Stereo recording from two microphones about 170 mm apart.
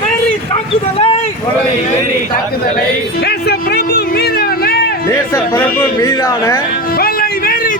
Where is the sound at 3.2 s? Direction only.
70° left (ahead or behind).